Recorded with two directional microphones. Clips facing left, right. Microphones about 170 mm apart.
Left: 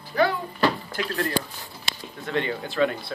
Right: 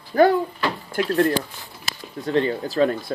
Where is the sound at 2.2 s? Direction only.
35° right (ahead or behind).